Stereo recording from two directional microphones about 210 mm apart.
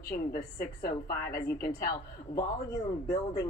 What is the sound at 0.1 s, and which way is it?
A woman's voice, 45° left (ahead or behind).